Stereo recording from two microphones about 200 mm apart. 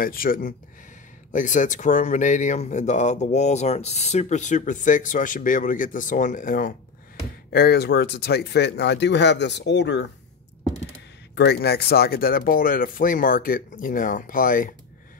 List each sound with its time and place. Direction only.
0.0 s speech: 45° left (ahead or behind)
7.5 s speech: 55° left (ahead or behind)
11.3 s speech: 55° left (ahead or behind)